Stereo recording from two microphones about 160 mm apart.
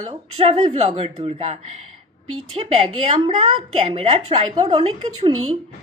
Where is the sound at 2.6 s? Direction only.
40° right (ahead or behind).